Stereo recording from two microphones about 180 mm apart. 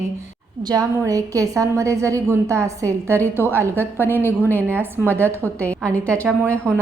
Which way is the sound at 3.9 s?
10° left (ahead or behind).